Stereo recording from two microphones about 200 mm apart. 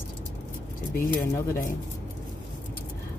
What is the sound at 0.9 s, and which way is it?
Speech, 15° left (ahead or behind).